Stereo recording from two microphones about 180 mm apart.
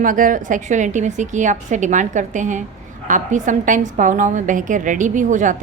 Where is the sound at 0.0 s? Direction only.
50° right (ahead or behind).